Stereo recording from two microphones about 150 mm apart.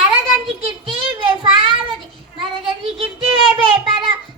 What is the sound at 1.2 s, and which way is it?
Child singing, 35° right (ahead or behind).